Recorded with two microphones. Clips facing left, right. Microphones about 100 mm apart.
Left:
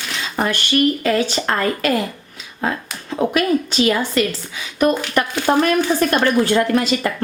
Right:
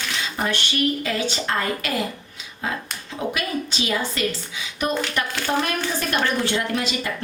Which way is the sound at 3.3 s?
55° left (ahead or behind).